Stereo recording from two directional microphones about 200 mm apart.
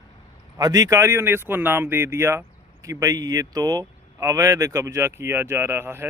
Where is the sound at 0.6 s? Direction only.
20° right (ahead or behind).